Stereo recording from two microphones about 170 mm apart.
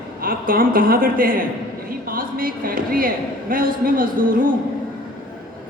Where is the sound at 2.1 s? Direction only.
55° right (ahead or behind).